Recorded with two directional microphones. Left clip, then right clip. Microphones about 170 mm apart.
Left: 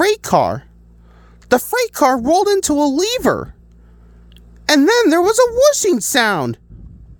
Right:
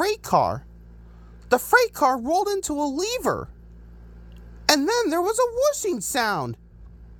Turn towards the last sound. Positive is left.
turn(degrees=40)  # may be behind; listen again after turning